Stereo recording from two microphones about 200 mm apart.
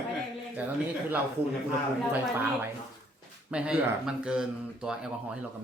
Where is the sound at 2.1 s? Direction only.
10° right (ahead or behind).